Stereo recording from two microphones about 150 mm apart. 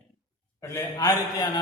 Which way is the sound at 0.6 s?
20° left (ahead or behind).